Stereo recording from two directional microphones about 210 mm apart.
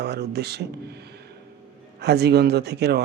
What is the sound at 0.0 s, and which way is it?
Speech, 50° right (ahead or behind).